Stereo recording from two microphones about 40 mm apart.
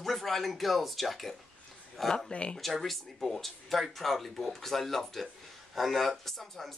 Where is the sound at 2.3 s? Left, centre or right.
Left.